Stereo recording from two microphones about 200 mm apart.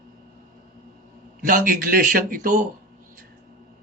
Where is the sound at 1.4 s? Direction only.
45° right (ahead or behind).